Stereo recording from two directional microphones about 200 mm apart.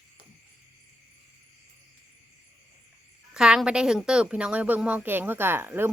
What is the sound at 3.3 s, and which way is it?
A woman's voice, 5° right (ahead or behind).